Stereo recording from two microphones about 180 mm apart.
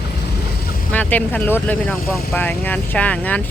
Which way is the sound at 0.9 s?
10° left (ahead or behind).